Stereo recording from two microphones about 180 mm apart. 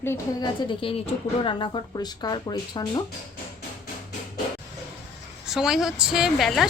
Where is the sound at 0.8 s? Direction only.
30° left (ahead or behind).